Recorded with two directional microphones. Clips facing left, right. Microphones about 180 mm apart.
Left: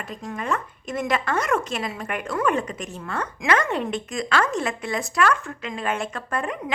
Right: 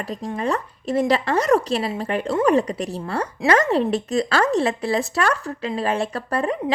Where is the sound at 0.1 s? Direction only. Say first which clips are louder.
Right 4 dB; 35° right (ahead or behind).